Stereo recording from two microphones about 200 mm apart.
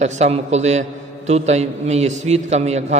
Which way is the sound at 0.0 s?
35° right (ahead or behind).